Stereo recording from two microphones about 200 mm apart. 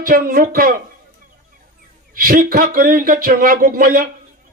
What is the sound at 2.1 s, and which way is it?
Speech, 45° right (ahead or behind).